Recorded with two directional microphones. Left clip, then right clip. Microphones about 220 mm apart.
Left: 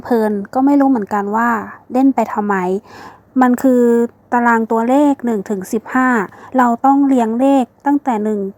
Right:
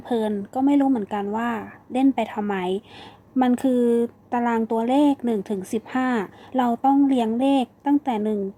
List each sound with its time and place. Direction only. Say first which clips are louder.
0.5 s a woman's voice: left 7 dB; 25° left (ahead or behind)